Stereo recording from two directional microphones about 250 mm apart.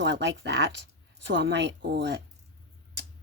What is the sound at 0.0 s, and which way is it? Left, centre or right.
Speech, right.